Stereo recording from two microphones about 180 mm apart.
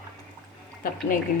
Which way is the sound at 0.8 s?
50° left (ahead or behind).